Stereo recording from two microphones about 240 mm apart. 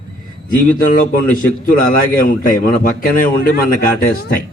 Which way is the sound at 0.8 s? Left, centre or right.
Left.